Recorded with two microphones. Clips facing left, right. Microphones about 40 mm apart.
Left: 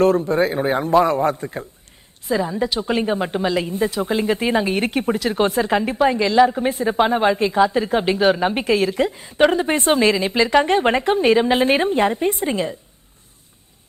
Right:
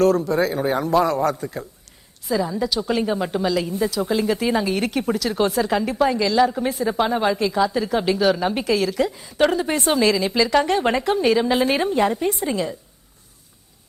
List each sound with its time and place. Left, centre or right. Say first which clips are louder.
0.0 s a man's voice: left 1 dB; left